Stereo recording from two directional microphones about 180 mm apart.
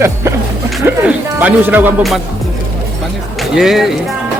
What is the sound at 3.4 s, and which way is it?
Speech, centre (ahead or behind).